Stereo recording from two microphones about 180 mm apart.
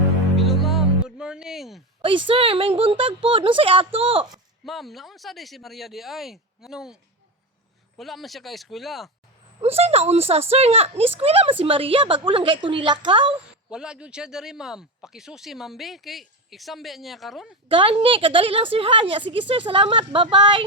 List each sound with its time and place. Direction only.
0.3 s music: centre (ahead or behind)
2.0 s a woman's voice: 30° right (ahead or behind)
4.6 s speech: centre (ahead or behind)
9.6 s a woman's voice: 35° right (ahead or behind)
13.7 s speech: 5° right (ahead or behind)
17.7 s a woman's voice: 30° right (ahead or behind)